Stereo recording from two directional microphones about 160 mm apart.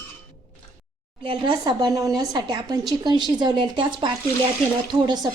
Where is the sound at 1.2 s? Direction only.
30° right (ahead or behind).